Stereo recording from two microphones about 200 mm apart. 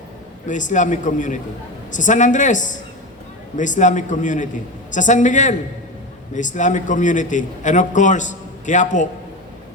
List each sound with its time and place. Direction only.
0.4 s a man's voice: 40° left (ahead or behind)